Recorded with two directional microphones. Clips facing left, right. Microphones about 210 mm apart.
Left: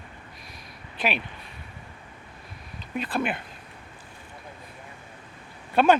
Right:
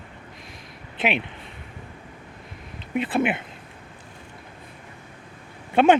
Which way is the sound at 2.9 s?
20° right (ahead or behind).